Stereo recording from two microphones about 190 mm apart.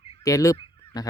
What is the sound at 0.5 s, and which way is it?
Honk, 25° left (ahead or behind).